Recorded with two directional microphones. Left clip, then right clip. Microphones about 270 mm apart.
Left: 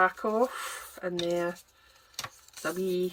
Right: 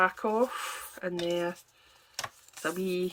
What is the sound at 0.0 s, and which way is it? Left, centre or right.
Speech, centre.